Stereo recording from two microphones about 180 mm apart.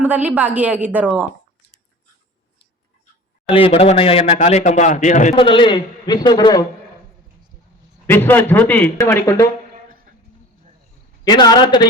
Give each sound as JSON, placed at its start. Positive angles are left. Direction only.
{"t": 0.0, "sound": "a woman's voice", "side_deg": -10}
{"t": 3.5, "sound": "a man's voice", "side_deg": 30}
{"t": 5.5, "sound": "a man's voice", "side_deg": 25}
{"t": 8.0, "sound": "a man's voice", "side_deg": 10}
{"t": 11.3, "sound": "a man's voice", "side_deg": 25}